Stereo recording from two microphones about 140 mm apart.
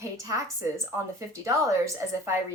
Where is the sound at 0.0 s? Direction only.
25° right (ahead or behind).